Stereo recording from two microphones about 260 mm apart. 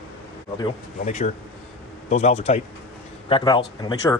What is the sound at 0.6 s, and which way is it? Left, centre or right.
Speech, left.